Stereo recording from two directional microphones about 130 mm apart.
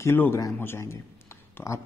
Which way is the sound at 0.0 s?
20° left (ahead or behind).